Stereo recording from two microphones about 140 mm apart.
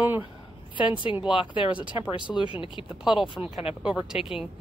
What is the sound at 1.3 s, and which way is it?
Speech, 35° left (ahead or behind).